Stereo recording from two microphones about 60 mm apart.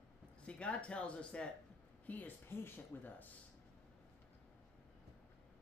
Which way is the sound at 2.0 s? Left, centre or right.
Left.